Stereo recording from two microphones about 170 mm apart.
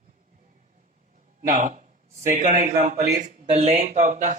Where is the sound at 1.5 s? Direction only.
50° right (ahead or behind).